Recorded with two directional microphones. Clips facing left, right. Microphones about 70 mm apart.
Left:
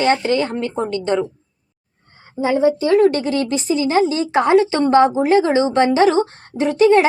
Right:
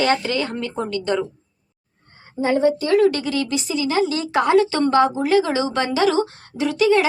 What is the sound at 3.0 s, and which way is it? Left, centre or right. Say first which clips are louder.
A woman's voice: left 3 dB; left.